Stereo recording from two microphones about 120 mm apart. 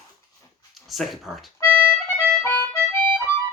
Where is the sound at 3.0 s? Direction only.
20° left (ahead or behind).